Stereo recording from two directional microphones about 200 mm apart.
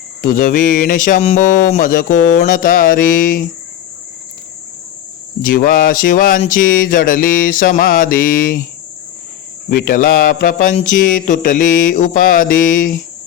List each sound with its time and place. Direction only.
0.2 s mantra: 40° left (ahead or behind)
5.4 s mantra: 45° left (ahead or behind)
9.6 s mantra: 45° left (ahead or behind)